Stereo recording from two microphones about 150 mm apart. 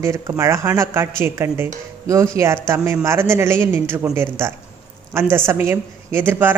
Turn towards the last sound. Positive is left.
turn(degrees=-15)  # may be behind; listen again after turning